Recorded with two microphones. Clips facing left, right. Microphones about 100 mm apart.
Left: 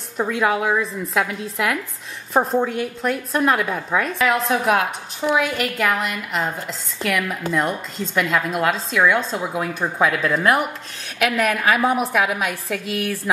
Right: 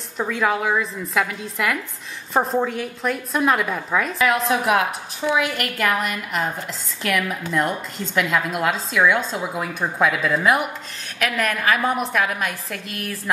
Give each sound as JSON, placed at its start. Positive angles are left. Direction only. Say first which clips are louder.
{"t": 0.2, "sound": "a woman's voice", "louder": "left 2 dB", "side_deg": 5}